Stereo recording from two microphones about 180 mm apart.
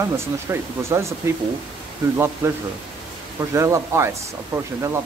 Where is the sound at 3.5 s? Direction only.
15° right (ahead or behind).